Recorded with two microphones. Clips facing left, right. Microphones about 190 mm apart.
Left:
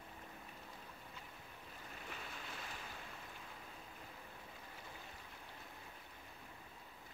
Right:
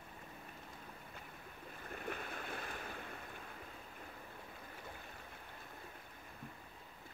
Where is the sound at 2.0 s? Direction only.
55° right (ahead or behind).